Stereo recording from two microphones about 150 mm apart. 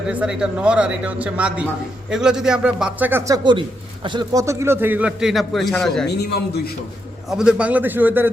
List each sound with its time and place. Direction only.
0.1 s a man's voice: 5° right (ahead or behind)
6.1 s a man's voice: 90° left
7.3 s a man's voice: 5° right (ahead or behind)